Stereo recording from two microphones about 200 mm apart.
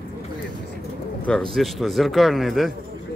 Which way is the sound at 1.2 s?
5° left (ahead or behind).